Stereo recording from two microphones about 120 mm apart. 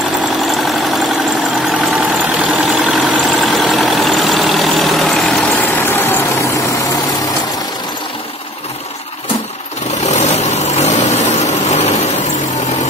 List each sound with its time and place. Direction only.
0.4 s engine: centre (ahead or behind)
1.7 s vehicle: 5° right (ahead or behind)
5.5 s vehicle: 15° left (ahead or behind)
10.0 s vehicle: 65° left (ahead or behind)